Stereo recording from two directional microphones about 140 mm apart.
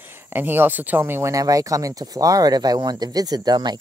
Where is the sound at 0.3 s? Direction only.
15° right (ahead or behind).